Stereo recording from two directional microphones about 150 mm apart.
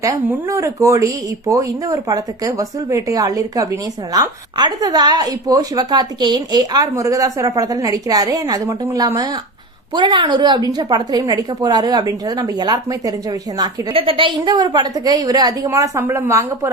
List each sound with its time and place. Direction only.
0.0 s speech: 20° right (ahead or behind)
13.6 s speech: 35° right (ahead or behind); by 16.7 s 20° right (ahead or behind)